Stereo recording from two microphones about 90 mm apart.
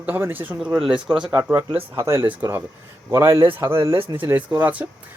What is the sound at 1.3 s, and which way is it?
Speech, 30° right (ahead or behind).